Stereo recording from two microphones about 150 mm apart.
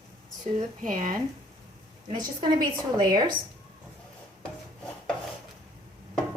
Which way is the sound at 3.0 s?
25° right (ahead or behind).